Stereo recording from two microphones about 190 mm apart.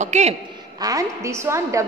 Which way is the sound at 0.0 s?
35° right (ahead or behind).